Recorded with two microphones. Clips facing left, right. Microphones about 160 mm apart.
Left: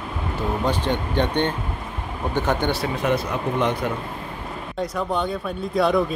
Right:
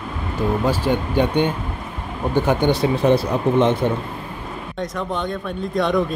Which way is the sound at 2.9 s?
30° right (ahead or behind).